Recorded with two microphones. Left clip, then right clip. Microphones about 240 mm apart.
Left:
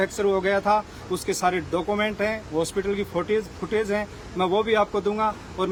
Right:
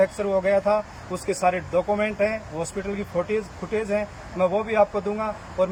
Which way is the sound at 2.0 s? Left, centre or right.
Left.